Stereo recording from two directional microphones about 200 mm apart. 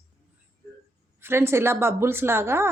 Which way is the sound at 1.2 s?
10° right (ahead or behind).